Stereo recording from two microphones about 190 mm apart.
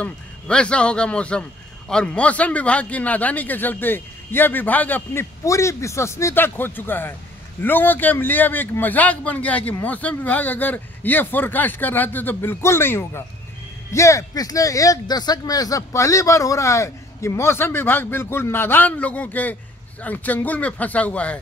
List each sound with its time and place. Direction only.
0.0 s a man's voice: 5° left (ahead or behind)